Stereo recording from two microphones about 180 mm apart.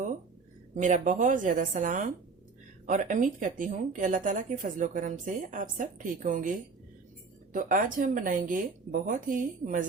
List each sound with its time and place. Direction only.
0.7 s speech: 45° right (ahead or behind)